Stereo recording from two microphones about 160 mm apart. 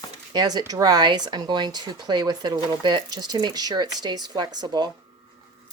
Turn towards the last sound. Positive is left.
turn(degrees=-25)  # may be behind; listen again after turning